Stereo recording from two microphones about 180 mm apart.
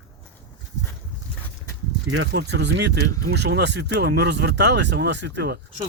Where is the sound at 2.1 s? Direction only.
80° right.